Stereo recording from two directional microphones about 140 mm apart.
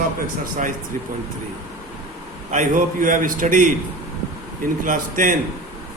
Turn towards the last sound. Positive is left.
turn(degrees=-70)  # may be behind; listen again after turning